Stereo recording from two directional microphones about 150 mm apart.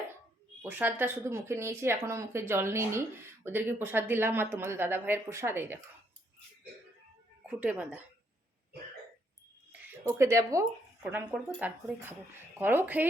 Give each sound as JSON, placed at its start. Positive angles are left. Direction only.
{"t": 0.6, "sound": "speech", "side_deg": -15}
{"t": 7.4, "sound": "speech", "side_deg": -10}
{"t": 10.2, "sound": "speech", "side_deg": -20}